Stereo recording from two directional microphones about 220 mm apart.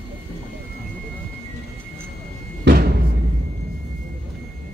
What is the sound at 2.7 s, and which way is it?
Music, 50° right (ahead or behind).